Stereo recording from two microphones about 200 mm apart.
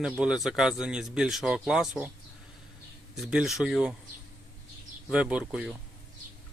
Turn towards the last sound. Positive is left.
turn(degrees=-5)  # may be behind; listen again after turning